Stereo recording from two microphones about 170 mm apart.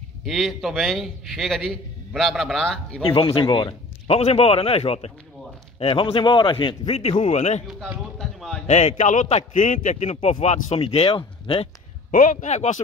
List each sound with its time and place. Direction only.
0.2 s a man's voice: centre (ahead or behind)
3.1 s a man's voice: 30° left (ahead or behind)
7.6 s a sound: centre (ahead or behind)
8.6 s a man's voice: 40° left (ahead or behind)
12.1 s a man's voice: 50° left (ahead or behind)